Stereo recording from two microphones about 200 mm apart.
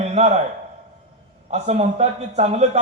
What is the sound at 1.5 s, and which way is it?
A man's voice, 35° right (ahead or behind).